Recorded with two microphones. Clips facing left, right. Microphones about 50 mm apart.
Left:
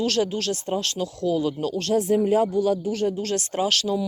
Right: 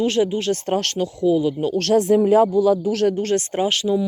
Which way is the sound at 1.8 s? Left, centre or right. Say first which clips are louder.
Right 6 dB; right.